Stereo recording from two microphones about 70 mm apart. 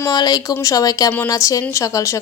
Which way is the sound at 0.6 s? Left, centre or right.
Left.